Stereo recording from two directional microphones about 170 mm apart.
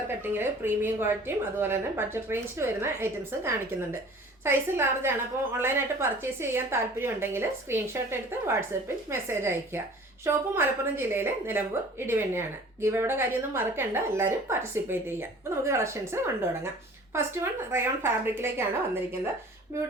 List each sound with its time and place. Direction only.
0.2 s a woman's voice: 10° right (ahead or behind)